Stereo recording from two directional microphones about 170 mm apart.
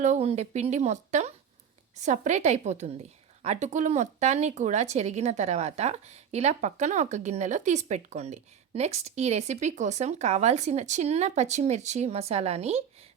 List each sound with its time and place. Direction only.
0.0 s a woman's voice: 40° right (ahead or behind)